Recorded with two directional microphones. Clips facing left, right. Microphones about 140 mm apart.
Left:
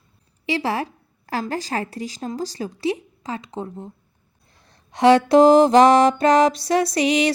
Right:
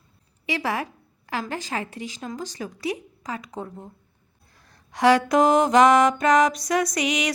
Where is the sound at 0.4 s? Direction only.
30° left (ahead or behind).